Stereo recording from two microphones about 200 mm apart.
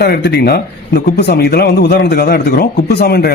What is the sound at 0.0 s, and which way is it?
A man's voice, 55° left (ahead or behind).